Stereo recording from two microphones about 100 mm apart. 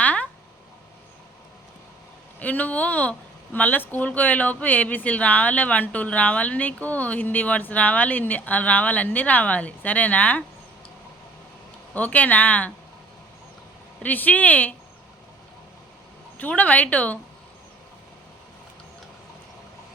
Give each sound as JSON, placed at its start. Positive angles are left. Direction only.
{"t": 0.0, "sound": "a sound", "side_deg": 15}
{"t": 2.4, "sound": "speech", "side_deg": 15}
{"t": 11.9, "sound": "speech", "side_deg": 15}
{"t": 14.0, "sound": "speech", "side_deg": 15}
{"t": 16.4, "sound": "speech", "side_deg": 15}